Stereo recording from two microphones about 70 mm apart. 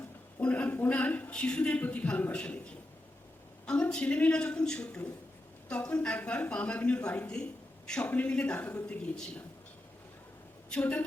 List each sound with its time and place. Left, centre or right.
0.3 s a sound: left
1.3 s speech: centre
3.7 s speech: centre
10.7 s a woman's voice: centre